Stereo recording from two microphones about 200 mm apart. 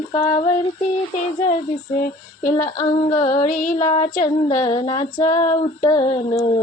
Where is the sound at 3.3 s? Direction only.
40° left (ahead or behind).